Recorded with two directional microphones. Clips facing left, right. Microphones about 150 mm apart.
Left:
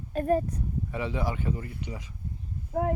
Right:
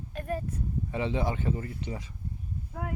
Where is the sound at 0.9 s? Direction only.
25° right (ahead or behind).